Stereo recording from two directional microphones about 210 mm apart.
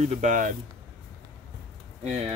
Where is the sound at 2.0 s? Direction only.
30° right (ahead or behind).